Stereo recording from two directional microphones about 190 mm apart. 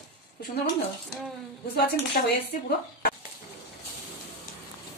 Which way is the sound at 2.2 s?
50° left (ahead or behind).